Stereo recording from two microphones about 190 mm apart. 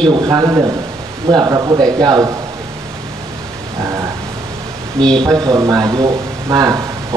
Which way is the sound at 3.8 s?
15° right (ahead or behind).